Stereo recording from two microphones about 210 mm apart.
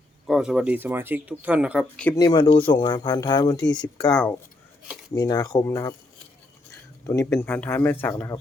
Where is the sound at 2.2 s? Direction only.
20° left (ahead or behind).